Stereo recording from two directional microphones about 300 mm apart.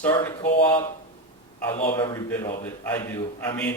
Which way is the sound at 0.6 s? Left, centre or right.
Centre.